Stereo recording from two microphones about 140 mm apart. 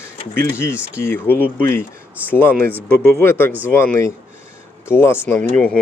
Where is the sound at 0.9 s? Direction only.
15° left (ahead or behind).